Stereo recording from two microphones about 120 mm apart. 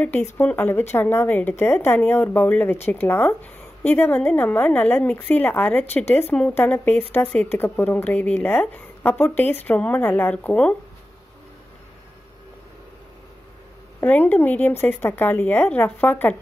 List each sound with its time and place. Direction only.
0.0 s speech: 15° left (ahead or behind)
14.0 s speech: 15° left (ahead or behind)